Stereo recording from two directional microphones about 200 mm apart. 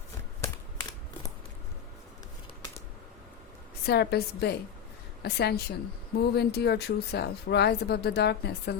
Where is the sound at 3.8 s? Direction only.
55° left (ahead or behind).